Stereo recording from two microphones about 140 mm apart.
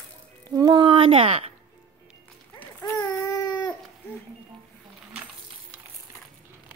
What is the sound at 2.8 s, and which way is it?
Baby cry, 25° left (ahead or behind).